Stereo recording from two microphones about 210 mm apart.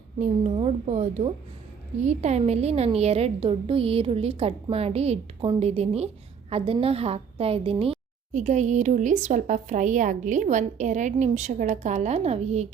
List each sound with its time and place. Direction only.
0.2 s a woman's voice: 30° right (ahead or behind)